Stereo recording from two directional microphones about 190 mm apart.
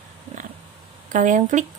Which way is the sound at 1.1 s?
40° right (ahead or behind).